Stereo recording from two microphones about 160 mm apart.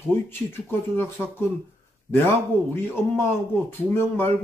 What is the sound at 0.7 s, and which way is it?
Speech, 10° left (ahead or behind).